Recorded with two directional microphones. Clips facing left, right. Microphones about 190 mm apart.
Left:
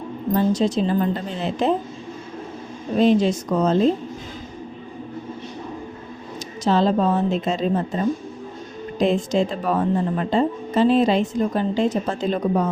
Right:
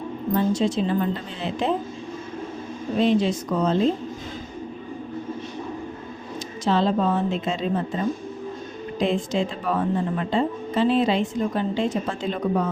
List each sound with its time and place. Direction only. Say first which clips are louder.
0.3 s speech: left 2 dB; 40° left (ahead or behind)
3.0 s speech: left 3 dB; 40° left (ahead or behind)
6.7 s speech: left 3 dB; 40° left (ahead or behind)
9.0 s speech: left 4 dB; 40° left (ahead or behind)